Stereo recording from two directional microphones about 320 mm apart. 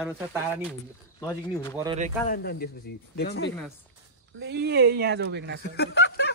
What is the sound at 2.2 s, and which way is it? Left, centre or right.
Speech, left.